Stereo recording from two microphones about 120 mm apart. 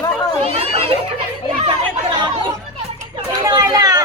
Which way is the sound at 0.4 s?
55° right (ahead or behind).